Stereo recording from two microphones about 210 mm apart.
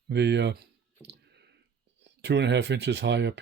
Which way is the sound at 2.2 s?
55° right (ahead or behind).